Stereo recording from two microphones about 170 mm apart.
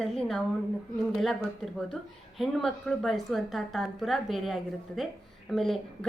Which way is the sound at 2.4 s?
Centre (ahead or behind).